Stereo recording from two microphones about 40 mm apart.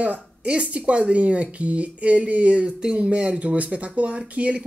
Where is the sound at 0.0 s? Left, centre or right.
Right.